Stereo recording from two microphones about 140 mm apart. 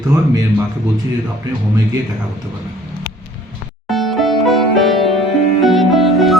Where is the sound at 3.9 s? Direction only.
Centre (ahead or behind).